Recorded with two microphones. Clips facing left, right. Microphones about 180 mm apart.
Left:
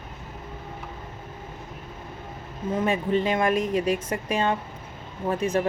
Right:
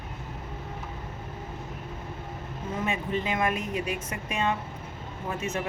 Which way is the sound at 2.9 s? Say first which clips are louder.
Left 6 dB; 30° left (ahead or behind).